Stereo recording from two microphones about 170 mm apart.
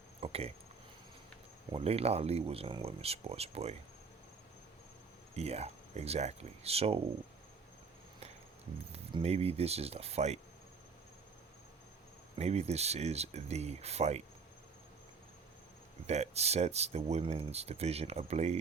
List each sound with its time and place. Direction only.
0.2 s speech: 35° right (ahead or behind)
1.7 s speech: 35° right (ahead or behind)
5.3 s speech: 40° right (ahead or behind)
8.9 s speech: 35° right (ahead or behind)
12.4 s speech: 40° right (ahead or behind)
16.0 s speech: 40° right (ahead or behind)